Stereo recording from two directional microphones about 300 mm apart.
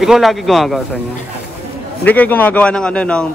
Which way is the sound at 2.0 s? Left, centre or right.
Centre.